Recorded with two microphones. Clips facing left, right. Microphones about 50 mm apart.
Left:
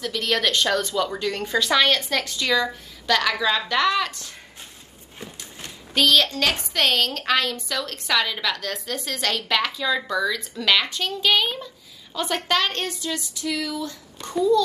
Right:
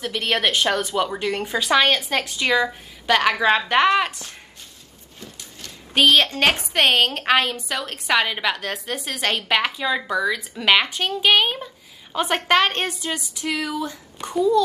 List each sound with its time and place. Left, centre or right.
0.0 s a woman's voice: right
5.2 s horse: left
5.9 s a woman's voice: right
14.2 s a woman's voice: right